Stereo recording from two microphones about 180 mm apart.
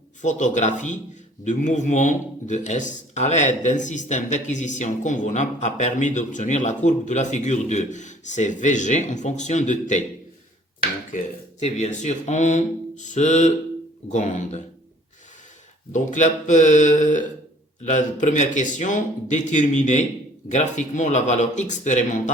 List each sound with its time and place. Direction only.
0.2 s speech: 45° left (ahead or behind)
11.1 s speech: 50° left (ahead or behind)
15.9 s speech: 40° left (ahead or behind)